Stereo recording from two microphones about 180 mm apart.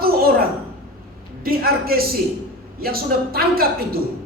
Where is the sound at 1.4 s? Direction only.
55° right (ahead or behind).